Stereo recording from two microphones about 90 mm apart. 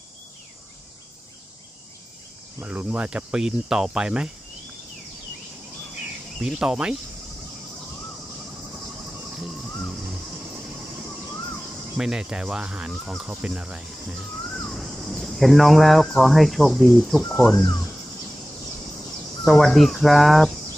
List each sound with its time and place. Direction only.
2.6 s cricket: 15° right (ahead or behind)
6.4 s cricket: 5° right (ahead or behind)
11.9 s cricket: 5° right (ahead or behind)
14.5 s speech: 5° left (ahead or behind)
19.5 s speech: centre (ahead or behind)